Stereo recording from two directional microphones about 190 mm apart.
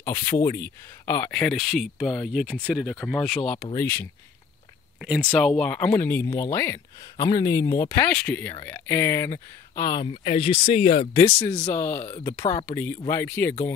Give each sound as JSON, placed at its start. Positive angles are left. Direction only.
{"t": 0.0, "sound": "speech", "side_deg": 15}
{"t": 5.0, "sound": "speech", "side_deg": -5}
{"t": 5.6, "sound": "speech", "side_deg": 5}
{"t": 11.5, "sound": "speech", "side_deg": 15}